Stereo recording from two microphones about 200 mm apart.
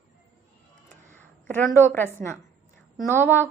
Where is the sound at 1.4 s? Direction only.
10° left (ahead or behind).